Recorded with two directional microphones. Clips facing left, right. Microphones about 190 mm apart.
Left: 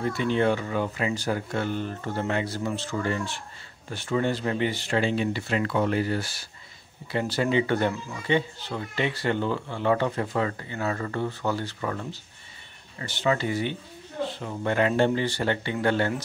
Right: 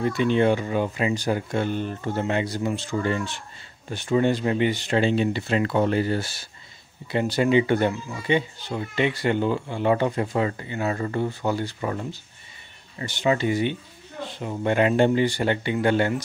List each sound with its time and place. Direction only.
0.0 s speech: 20° right (ahead or behind)